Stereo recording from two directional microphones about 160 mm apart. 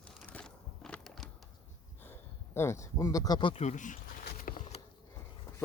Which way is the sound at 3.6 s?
50° left (ahead or behind).